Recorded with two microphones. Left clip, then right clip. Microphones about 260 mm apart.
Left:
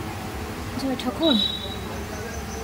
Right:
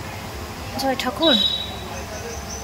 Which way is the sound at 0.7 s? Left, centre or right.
Centre.